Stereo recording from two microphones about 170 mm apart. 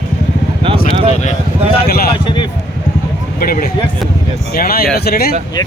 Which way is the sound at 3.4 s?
60° left (ahead or behind).